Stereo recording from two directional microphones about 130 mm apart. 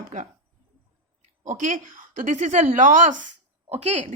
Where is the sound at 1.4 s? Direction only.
70° right (ahead or behind).